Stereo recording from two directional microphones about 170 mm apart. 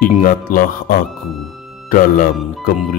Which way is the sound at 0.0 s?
55° left (ahead or behind).